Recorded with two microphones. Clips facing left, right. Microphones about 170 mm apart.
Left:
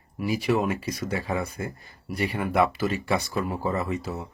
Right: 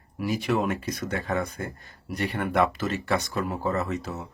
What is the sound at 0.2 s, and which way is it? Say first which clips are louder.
Speech: left 1 dB; 5° left (ahead or behind).